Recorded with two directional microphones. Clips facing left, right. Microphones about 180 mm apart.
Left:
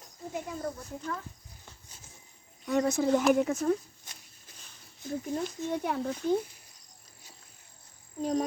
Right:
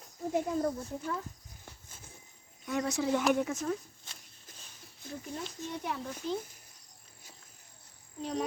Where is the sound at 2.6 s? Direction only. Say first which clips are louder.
Left 5 dB; 50° left (ahead or behind).